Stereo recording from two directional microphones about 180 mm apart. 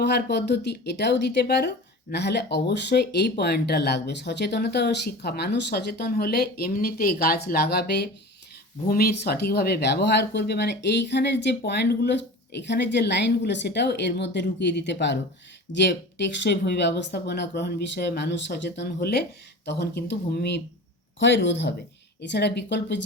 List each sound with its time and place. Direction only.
0.0 s speech: 65° left (ahead or behind)
18.9 s speech: 60° left (ahead or behind)
19.6 s speech: 70° left (ahead or behind)
21.2 s speech: 90° left
22.3 s speech: 70° left (ahead or behind)